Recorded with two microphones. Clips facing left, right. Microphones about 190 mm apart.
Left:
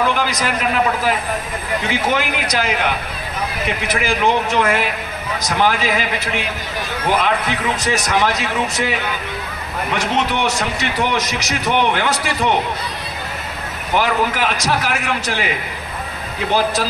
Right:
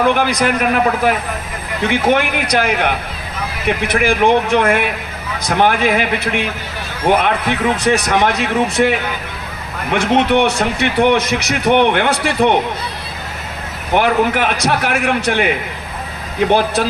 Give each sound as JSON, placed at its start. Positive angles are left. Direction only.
{"t": 0.0, "sound": "speech", "side_deg": -55}
{"t": 13.9, "sound": "speech", "side_deg": -55}